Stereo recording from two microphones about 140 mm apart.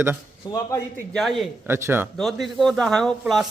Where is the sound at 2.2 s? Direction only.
Centre (ahead or behind).